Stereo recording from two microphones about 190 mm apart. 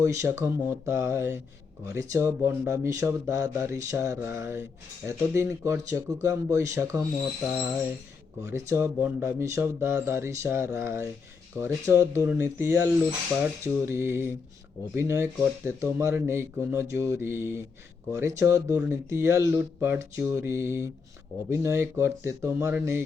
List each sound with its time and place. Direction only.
0.0 s speech: 15° right (ahead or behind)
8.4 s speech: 15° right (ahead or behind)